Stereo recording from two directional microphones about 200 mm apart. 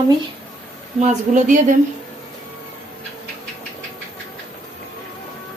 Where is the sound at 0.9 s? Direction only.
35° right (ahead or behind).